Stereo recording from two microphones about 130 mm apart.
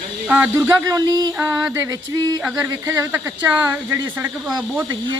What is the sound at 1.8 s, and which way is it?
Speech, 30° right (ahead or behind).